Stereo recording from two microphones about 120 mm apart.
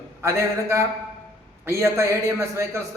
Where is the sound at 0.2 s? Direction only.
20° right (ahead or behind).